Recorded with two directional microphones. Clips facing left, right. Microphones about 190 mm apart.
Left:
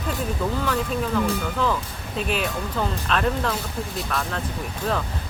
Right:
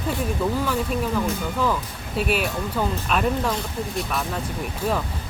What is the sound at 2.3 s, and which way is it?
Speech, 10° right (ahead or behind).